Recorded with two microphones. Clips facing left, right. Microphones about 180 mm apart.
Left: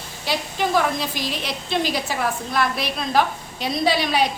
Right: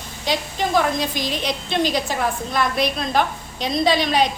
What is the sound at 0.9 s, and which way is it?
A woman's voice, 5° left (ahead or behind).